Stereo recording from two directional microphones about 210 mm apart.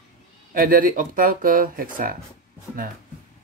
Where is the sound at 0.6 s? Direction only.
40° right (ahead or behind).